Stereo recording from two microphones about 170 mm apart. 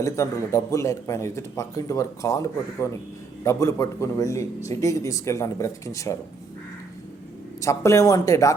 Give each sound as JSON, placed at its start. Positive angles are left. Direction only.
{"t": 0.0, "sound": "speech", "side_deg": 15}
{"t": 7.6, "sound": "speech", "side_deg": 15}